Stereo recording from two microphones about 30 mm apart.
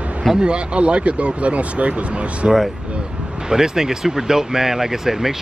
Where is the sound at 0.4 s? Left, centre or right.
Right.